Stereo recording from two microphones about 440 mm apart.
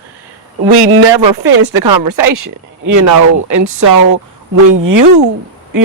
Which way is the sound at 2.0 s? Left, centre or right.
Right.